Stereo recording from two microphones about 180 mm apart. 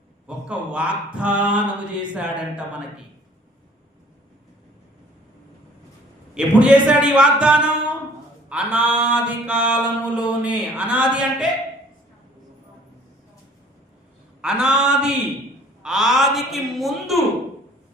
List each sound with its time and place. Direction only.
0.3 s a man's voice: 5° right (ahead or behind)
2.0 s mantra: 5° right (ahead or behind)
6.3 s a man's voice: 5° right (ahead or behind)
8.4 s mantra: 5° right (ahead or behind)
14.4 s mantra: 5° right (ahead or behind)